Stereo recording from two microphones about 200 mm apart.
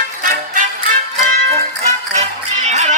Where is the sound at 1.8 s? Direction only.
35° right (ahead or behind).